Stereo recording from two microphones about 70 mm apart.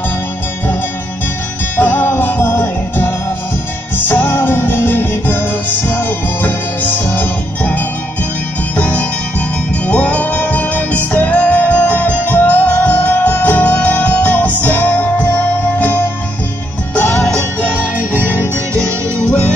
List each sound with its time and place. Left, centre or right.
1.8 s music: left